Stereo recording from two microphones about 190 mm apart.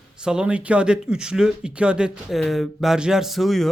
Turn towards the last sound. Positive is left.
turn(degrees=0)  # may be behind; listen again after turning